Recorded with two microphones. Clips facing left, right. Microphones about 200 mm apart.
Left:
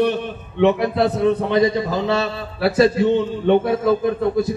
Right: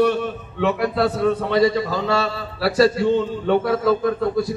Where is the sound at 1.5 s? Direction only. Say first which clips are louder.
Left 1 dB; 20° left (ahead or behind).